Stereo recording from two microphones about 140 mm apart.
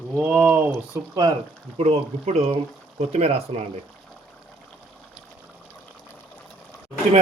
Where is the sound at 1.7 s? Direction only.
45° right (ahead or behind).